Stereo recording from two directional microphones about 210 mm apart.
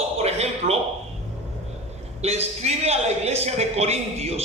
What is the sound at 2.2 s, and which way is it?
A man's voice, 30° right (ahead or behind).